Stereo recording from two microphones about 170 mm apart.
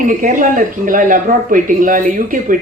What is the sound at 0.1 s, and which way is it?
Speech, 50° right (ahead or behind).